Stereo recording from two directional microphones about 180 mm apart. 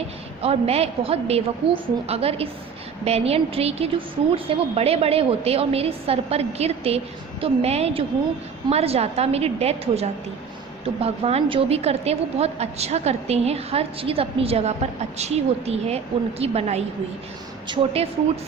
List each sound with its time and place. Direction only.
0.4 s a woman's voice: 35° right (ahead or behind)